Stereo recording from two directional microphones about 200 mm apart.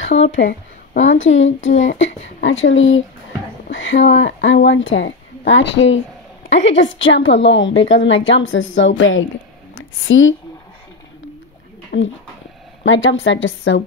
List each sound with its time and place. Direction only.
0.9 s a woman's voice: 70° left (ahead or behind)
11.9 s speech: 55° left (ahead or behind)
12.8 s a woman's voice: 70° left (ahead or behind)